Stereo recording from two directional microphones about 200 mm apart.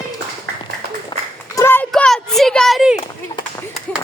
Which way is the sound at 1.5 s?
10° left (ahead or behind).